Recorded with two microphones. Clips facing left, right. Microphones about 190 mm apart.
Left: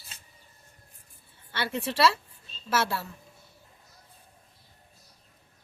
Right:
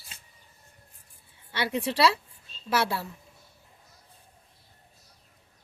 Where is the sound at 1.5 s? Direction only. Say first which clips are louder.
Right 2 dB; 15° right (ahead or behind).